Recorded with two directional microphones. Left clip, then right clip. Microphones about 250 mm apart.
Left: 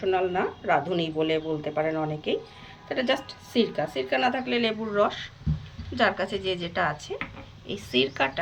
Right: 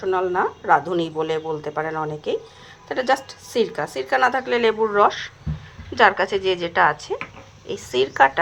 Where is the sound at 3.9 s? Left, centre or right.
Centre.